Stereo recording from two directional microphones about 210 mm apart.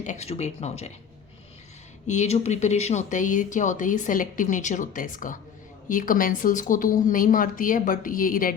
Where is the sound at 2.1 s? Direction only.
30° left (ahead or behind).